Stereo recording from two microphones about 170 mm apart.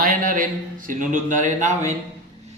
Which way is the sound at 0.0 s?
55° right (ahead or behind).